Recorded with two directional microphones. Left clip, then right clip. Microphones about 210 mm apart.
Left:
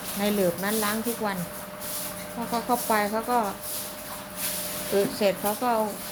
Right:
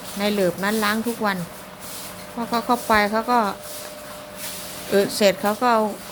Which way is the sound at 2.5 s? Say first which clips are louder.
Right 6 dB; 25° right (ahead or behind).